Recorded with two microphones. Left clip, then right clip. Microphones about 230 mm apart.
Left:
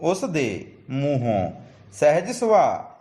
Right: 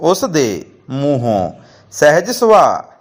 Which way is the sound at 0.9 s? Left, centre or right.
Right.